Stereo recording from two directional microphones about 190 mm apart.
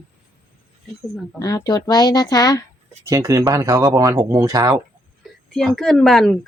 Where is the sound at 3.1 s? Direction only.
15° right (ahead or behind).